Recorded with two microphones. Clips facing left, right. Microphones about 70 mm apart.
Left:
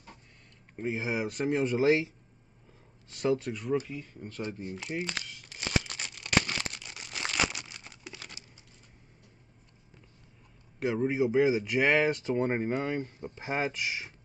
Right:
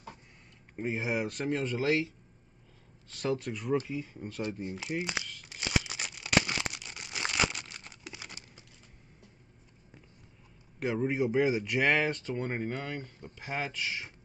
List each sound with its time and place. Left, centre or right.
0.7 s speech: centre
1.6 s speech: centre
3.3 s speech: centre
4.5 s speech: right
4.7 s speech: centre
5.5 s a sound: centre
8.1 s a sound: centre
10.8 s speech: centre
12.1 s speech: centre